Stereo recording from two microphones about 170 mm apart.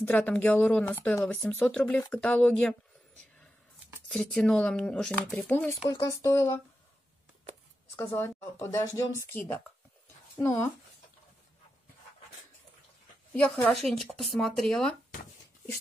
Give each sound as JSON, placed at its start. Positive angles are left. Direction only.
{"t": 0.0, "sound": "speech", "side_deg": 10}
{"t": 4.1, "sound": "speech", "side_deg": 0}
{"t": 5.9, "sound": "speech", "side_deg": 20}
{"t": 7.9, "sound": "a woman's voice", "side_deg": 15}
{"t": 13.4, "sound": "speech", "side_deg": 5}